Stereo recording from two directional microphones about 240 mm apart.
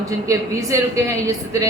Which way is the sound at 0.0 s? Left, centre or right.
Centre.